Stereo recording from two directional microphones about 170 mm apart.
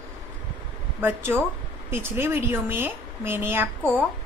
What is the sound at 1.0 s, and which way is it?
A woman's voice, 10° right (ahead or behind).